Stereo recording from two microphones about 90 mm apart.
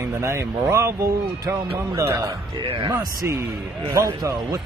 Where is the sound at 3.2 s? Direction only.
25° right (ahead or behind).